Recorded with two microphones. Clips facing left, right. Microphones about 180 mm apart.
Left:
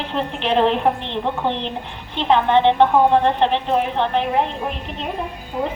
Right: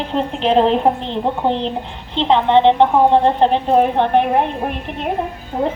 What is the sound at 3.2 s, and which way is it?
A woman's voice, 40° right (ahead or behind).